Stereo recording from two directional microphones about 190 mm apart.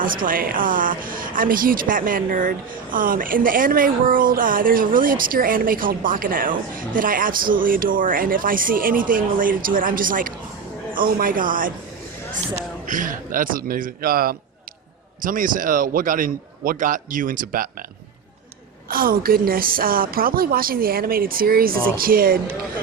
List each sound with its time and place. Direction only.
0.0 s speech: 45° right (ahead or behind)
12.8 s speech: 45° right (ahead or behind)
18.9 s speech: 50° right (ahead or behind)